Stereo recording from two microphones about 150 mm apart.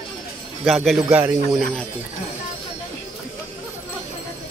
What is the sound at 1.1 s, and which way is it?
Speech, 10° right (ahead or behind).